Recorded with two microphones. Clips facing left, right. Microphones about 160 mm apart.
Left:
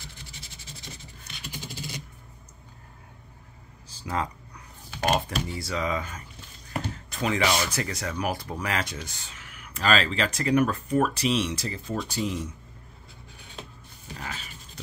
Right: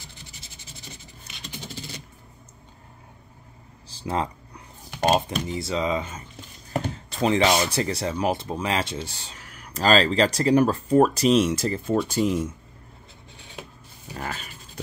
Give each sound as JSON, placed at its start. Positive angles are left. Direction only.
{"t": 3.9, "sound": "a sound", "side_deg": -25}
{"t": 5.5, "sound": "speech", "side_deg": -25}
{"t": 14.1, "sound": "dog", "side_deg": -50}